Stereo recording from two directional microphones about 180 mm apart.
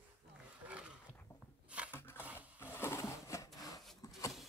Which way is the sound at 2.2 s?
10° right (ahead or behind).